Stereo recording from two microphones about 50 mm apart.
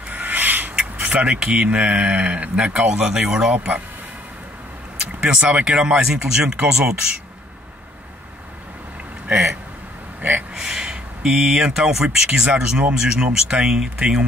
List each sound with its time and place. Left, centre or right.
0.1 s a sound: right
0.7 s speech: right; by 3.5 s centre
3.5 s speech: right
5.2 s speech: right
9.3 s a sound: centre
10.5 s speech: centre
13.4 s speech: centre